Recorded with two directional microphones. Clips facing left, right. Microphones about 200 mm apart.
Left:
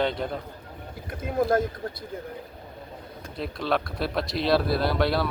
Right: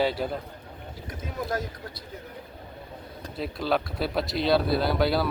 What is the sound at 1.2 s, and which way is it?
Speech, 50° left (ahead or behind).